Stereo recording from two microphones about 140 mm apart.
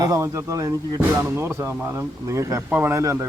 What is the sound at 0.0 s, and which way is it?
Speech, 25° right (ahead or behind).